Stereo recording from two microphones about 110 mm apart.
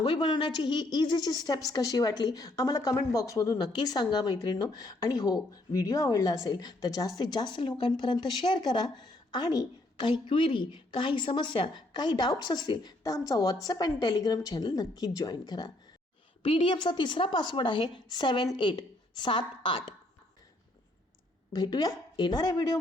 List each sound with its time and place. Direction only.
0.0 s a woman's voice: 50° left (ahead or behind)
10.1 s a woman's voice: 50° left (ahead or behind)
16.4 s a woman's voice: 55° left (ahead or behind)
21.5 s a woman's voice: 35° left (ahead or behind)